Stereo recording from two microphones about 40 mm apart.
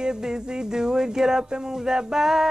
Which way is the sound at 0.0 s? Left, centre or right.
Centre.